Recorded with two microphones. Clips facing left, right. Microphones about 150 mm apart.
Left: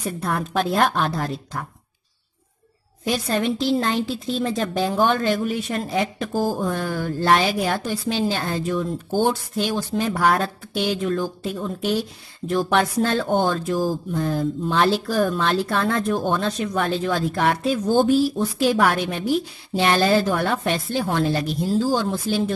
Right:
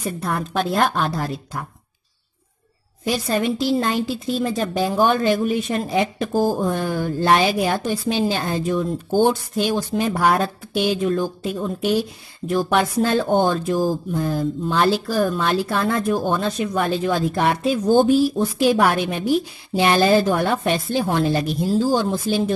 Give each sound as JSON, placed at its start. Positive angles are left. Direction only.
{"t": 0.2, "sound": "a woman's voice", "side_deg": 0}
{"t": 3.1, "sound": "a woman's voice", "side_deg": -5}